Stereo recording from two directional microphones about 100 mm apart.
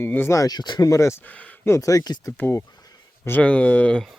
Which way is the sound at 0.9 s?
30° left (ahead or behind).